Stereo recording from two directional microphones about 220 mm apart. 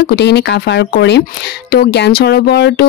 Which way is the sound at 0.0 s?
50° left (ahead or behind).